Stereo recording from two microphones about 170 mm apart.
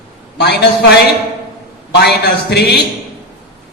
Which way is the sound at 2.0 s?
75° left (ahead or behind).